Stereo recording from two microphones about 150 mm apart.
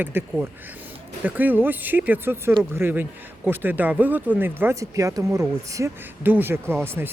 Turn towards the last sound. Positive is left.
turn(degrees=-15)  # may be behind; listen again after turning